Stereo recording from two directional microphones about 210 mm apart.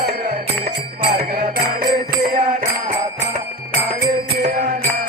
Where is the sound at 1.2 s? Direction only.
45° right (ahead or behind).